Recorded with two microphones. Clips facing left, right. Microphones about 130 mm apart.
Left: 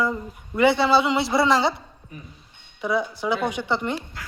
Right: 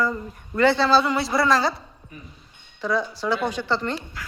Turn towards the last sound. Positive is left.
turn(degrees=15)  # may be behind; listen again after turning